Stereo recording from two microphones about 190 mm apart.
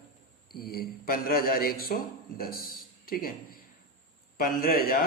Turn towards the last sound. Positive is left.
turn(degrees=50)  # may be behind; listen again after turning